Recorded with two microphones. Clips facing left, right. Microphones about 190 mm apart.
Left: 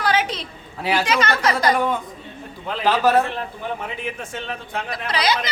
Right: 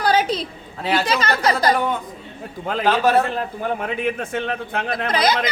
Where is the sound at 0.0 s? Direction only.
35° right (ahead or behind).